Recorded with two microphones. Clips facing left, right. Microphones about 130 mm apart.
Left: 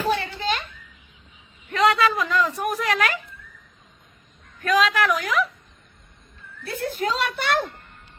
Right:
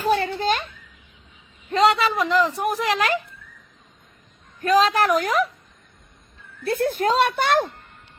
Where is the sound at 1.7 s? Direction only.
25° right (ahead or behind).